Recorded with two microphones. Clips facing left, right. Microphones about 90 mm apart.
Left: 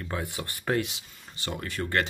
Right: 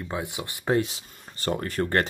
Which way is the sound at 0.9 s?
40° right (ahead or behind).